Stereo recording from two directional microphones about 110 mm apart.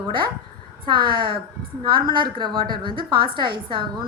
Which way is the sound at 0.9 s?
45° right (ahead or behind).